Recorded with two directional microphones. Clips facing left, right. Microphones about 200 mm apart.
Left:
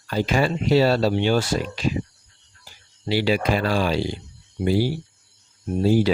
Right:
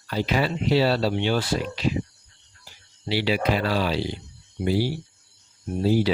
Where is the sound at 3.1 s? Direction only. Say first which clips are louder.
Left 2 dB; 45° left (ahead or behind).